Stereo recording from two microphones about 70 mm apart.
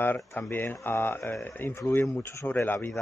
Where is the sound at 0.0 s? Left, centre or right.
Left.